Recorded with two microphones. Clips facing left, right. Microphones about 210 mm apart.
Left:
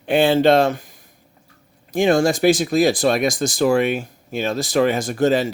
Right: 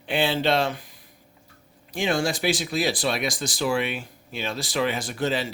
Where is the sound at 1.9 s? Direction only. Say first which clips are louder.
Left 9 dB; 45° left (ahead or behind).